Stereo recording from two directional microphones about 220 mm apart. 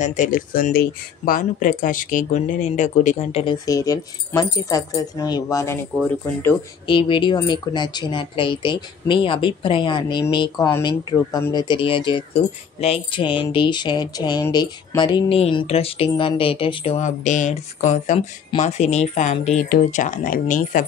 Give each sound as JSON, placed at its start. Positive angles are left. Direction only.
{"t": 0.0, "sound": "speech", "side_deg": 35}
{"t": 3.6, "sound": "speech", "side_deg": 15}
{"t": 6.9, "sound": "speech", "side_deg": 20}